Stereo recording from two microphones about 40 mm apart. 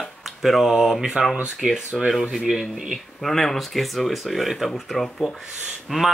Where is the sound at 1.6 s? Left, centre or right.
Centre.